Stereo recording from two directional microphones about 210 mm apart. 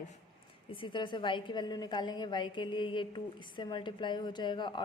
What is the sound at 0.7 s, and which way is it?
A woman's voice, 25° left (ahead or behind).